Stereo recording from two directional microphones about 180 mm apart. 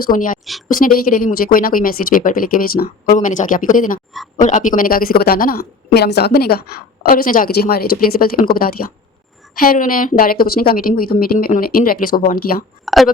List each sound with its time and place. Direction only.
0.0 s speech: 50° left (ahead or behind)
12.8 s speech: centre (ahead or behind)